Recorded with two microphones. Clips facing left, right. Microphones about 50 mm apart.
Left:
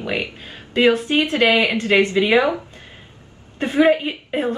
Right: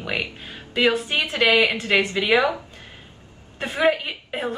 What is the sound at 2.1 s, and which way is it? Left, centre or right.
Speech, centre.